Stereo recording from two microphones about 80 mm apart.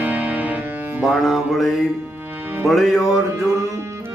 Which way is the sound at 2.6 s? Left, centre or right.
Centre.